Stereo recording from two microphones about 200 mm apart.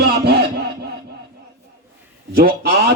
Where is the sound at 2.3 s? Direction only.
50° right (ahead or behind).